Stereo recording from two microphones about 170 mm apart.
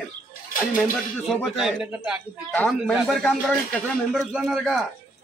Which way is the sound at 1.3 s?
5° right (ahead or behind).